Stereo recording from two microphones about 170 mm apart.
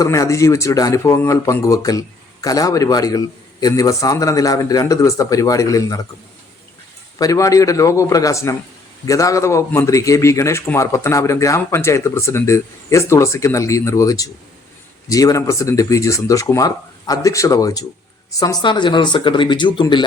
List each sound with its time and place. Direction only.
0.0 s speech: 20° left (ahead or behind)
7.2 s a man's voice: 20° left (ahead or behind)